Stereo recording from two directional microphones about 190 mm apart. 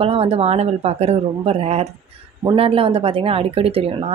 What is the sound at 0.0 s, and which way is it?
Speech, 30° right (ahead or behind).